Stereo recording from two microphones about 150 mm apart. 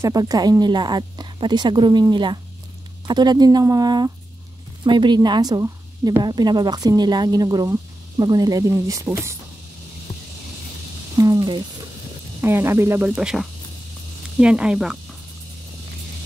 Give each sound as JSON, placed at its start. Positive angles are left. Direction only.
{"t": 0.0, "sound": "a woman's voice", "side_deg": -25}
{"t": 11.1, "sound": "speech", "side_deg": -25}
{"t": 12.4, "sound": "speech", "side_deg": -15}
{"t": 13.1, "sound": "speech", "side_deg": -5}